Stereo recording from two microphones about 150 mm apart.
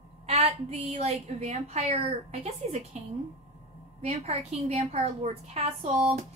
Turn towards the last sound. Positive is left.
turn(degrees=-45)  # may be behind; listen again after turning